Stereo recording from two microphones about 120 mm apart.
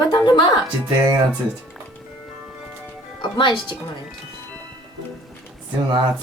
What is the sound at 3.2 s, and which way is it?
Speech, 40° left (ahead or behind).